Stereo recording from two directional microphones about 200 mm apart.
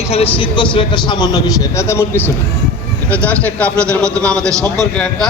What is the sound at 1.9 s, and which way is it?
A man's voice, 10° left (ahead or behind).